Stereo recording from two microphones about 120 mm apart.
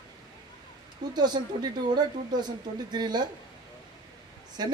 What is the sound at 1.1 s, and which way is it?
Speech, 35° right (ahead or behind).